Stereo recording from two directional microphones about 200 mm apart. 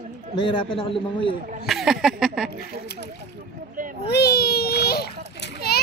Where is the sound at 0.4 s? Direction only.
25° left (ahead or behind).